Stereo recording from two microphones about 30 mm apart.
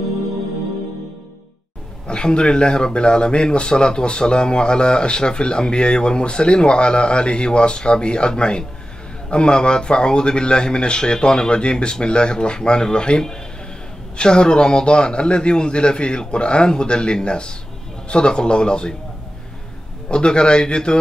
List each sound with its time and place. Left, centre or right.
2.0 s speech: left
20.1 s speech: left